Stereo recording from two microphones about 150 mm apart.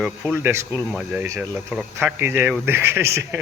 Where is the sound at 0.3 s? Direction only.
15° right (ahead or behind).